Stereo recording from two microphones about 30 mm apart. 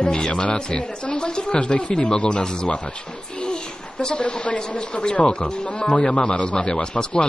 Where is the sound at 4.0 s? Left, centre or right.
Left.